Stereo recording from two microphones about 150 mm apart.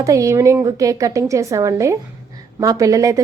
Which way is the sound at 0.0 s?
20° right (ahead or behind).